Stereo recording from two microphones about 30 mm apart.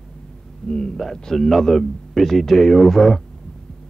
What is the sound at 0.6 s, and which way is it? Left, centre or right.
Speech, left.